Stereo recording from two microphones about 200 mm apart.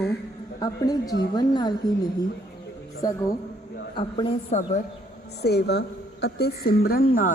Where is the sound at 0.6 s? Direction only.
20° left (ahead or behind).